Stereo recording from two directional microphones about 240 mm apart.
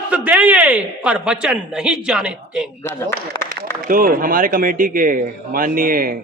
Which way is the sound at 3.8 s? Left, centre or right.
Right.